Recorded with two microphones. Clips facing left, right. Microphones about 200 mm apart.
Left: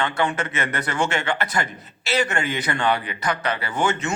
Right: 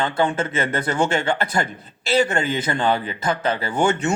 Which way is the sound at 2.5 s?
25° right (ahead or behind).